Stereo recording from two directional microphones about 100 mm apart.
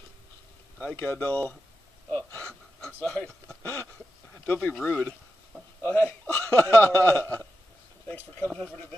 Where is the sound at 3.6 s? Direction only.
20° left (ahead or behind).